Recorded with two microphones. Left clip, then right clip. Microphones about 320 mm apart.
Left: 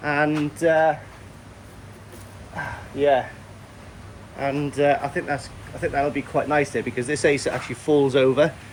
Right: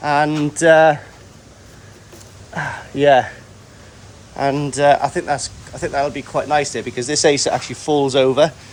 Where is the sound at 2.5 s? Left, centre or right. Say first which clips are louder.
Right 7 dB; right.